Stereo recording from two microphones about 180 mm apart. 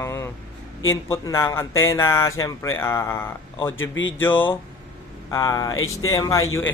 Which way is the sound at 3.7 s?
90° left.